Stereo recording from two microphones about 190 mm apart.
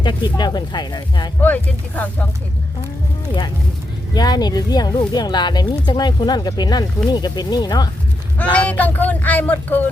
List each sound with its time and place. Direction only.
0.0 s speech: 25° left (ahead or behind)
1.4 s speech: 10° left (ahead or behind)
4.1 s speech: 20° left (ahead or behind)
8.5 s speech: 10° left (ahead or behind)